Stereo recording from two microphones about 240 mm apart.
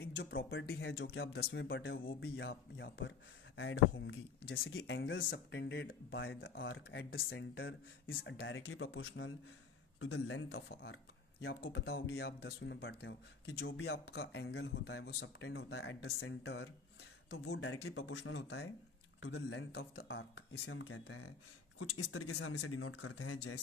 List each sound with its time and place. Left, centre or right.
0.0 s speech: left
10.7 s speech: left
21.7 s speech: left